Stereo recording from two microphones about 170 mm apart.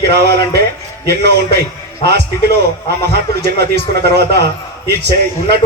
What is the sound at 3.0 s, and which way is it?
A man's voice, 70° right (ahead or behind).